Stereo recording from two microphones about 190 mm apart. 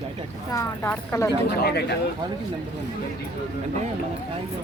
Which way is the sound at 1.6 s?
60° left (ahead or behind).